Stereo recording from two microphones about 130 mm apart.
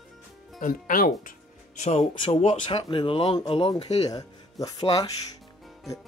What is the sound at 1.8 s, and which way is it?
Speech, 55° left (ahead or behind).